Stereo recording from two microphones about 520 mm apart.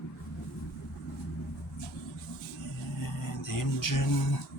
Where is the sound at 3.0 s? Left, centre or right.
Left.